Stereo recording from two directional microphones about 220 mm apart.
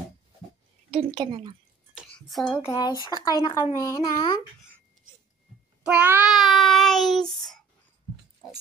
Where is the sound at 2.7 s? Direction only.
20° left (ahead or behind).